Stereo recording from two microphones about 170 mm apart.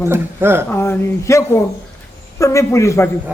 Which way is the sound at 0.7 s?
15° left (ahead or behind).